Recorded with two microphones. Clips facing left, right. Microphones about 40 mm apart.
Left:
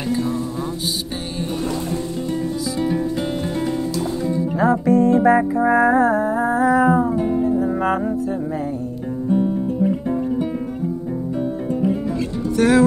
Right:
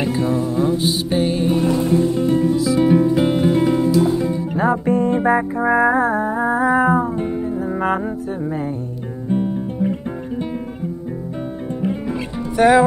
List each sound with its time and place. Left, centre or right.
0.0 s music: centre
4.6 s music: right
5.6 s a sound: right
7.2 s music: right
12.1 s music: right